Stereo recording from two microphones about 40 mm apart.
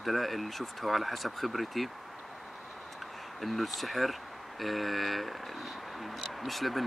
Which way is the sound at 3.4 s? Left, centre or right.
Centre.